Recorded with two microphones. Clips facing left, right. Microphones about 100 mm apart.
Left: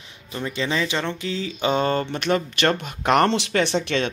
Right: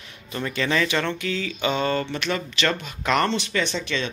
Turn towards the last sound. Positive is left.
turn(degrees=65)  # may be behind; listen again after turning